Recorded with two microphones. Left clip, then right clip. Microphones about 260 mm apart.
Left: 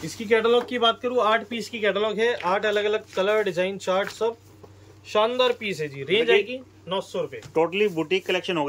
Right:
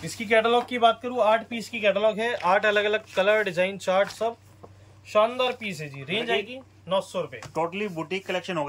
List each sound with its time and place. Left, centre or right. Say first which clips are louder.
0.0 s a man's voice: even; centre